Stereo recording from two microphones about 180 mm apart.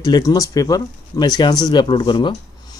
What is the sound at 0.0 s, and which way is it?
Speech, 20° left (ahead or behind).